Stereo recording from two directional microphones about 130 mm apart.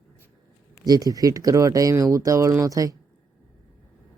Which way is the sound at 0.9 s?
30° right (ahead or behind).